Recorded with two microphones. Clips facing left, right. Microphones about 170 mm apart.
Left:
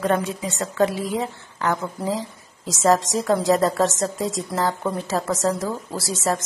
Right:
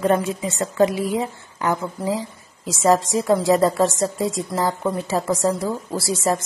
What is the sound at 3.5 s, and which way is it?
A woman's voice, 10° right (ahead or behind).